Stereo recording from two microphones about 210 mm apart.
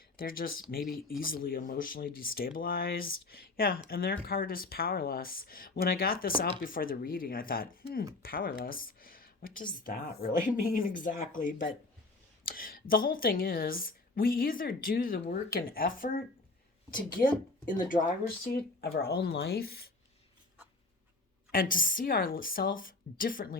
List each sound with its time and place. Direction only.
0.2 s speech: 45° left (ahead or behind)
17.7 s speech: 40° left (ahead or behind)
21.5 s speech: 40° left (ahead or behind)